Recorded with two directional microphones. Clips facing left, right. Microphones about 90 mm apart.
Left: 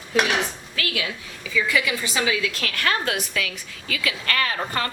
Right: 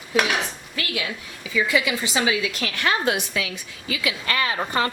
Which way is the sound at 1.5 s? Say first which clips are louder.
Right 1 dB; 20° right (ahead or behind).